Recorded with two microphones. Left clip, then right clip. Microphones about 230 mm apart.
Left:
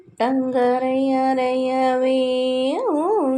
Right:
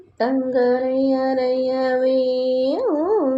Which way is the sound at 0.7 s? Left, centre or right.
Left.